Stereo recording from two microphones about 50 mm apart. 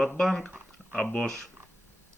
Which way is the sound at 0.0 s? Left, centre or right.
Centre.